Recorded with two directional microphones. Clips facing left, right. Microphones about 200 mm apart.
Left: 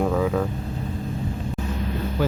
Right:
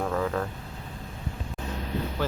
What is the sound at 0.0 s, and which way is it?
Vehicle, 5° left (ahead or behind).